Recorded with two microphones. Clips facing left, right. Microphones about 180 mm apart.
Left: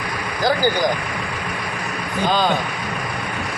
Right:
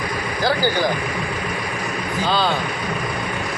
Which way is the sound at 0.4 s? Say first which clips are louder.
Left 1 dB; 15° left (ahead or behind).